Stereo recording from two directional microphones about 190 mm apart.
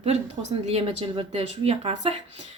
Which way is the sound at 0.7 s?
30° right (ahead or behind).